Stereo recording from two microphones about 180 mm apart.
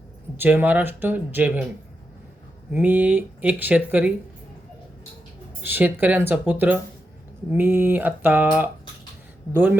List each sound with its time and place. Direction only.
0.3 s speech: 10° right (ahead or behind)
2.7 s speech: 10° right (ahead or behind)
5.6 s speech: 10° right (ahead or behind)